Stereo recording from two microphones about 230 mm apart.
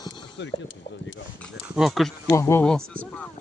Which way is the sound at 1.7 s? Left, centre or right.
Centre.